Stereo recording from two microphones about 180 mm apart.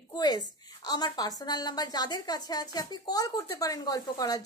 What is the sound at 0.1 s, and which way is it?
A woman's voice, 20° left (ahead or behind).